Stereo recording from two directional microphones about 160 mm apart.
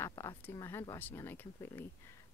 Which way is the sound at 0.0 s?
20° left (ahead or behind).